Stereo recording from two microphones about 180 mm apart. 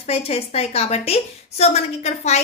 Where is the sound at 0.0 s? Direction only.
35° left (ahead or behind).